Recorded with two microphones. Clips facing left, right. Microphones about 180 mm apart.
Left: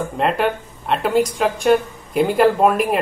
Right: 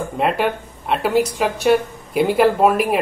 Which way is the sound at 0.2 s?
Centre (ahead or behind).